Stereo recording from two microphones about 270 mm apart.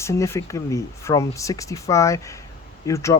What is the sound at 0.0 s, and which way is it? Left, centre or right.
Speech, centre.